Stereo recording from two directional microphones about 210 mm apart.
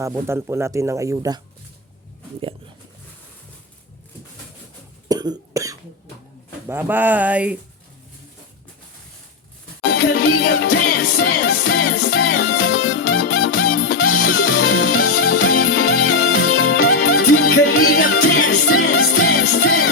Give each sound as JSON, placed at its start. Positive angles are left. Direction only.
{"t": 0.0, "sound": "speech", "side_deg": -15}
{"t": 5.0, "sound": "cough", "side_deg": -20}
{"t": 6.7, "sound": "speech", "side_deg": -10}
{"t": 10.6, "sound": "music", "side_deg": 45}
{"t": 12.1, "sound": "music", "side_deg": 80}